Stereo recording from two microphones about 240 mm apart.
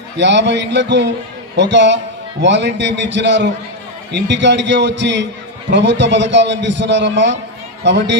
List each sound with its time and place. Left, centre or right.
0.2 s a man's voice: right